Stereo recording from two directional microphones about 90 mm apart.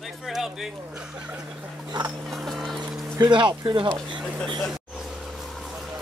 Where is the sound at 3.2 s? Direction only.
60° right (ahead or behind).